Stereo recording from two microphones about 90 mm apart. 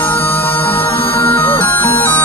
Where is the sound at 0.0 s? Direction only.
20° left (ahead or behind).